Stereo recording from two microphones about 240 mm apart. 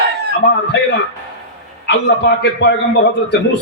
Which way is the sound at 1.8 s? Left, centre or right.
Left.